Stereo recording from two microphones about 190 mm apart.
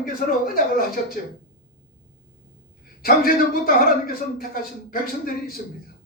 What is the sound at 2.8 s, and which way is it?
A man's voice, 50° left (ahead or behind).